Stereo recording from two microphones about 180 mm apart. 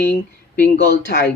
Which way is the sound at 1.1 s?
65° left (ahead or behind).